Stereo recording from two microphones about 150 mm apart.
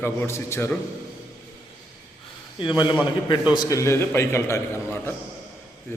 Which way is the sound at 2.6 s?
30° left (ahead or behind).